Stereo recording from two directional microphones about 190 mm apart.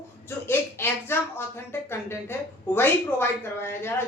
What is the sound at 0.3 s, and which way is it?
Speech, 10° left (ahead or behind).